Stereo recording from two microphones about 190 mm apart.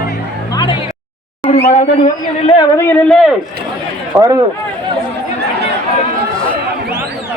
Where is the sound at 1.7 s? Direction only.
35° left (ahead or behind).